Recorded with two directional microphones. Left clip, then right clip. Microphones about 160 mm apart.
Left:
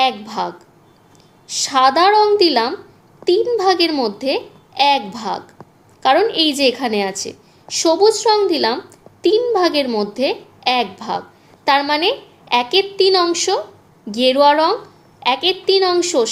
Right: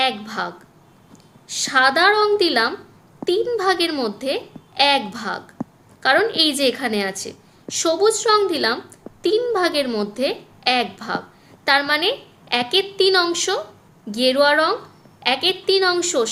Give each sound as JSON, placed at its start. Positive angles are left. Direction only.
{"t": 0.0, "sound": "a child's voice", "side_deg": 15}